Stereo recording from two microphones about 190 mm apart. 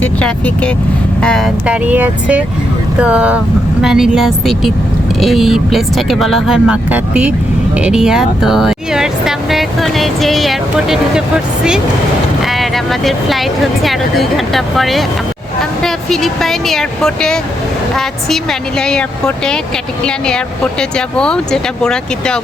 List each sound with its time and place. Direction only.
0.0 s speech: 5° left (ahead or behind)
1.6 s speech: 5° right (ahead or behind)
12.5 s speech: centre (ahead or behind)
18.8 s speech: 5° left (ahead or behind)